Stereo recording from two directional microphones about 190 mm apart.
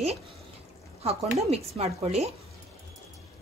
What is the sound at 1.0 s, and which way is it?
Speech, 30° right (ahead or behind).